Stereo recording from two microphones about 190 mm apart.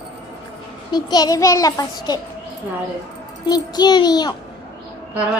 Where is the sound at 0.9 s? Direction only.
20° left (ahead or behind).